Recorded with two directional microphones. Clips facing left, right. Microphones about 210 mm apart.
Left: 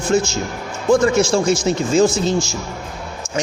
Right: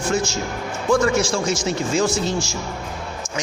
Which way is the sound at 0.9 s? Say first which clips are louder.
Left 4 dB; 25° left (ahead or behind).